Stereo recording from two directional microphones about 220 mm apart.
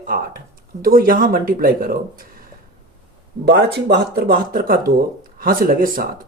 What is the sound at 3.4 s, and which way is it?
Speech, 50° right (ahead or behind).